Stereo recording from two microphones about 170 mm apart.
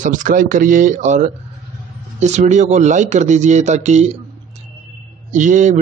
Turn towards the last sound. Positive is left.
turn(degrees=-45)  # may be behind; listen again after turning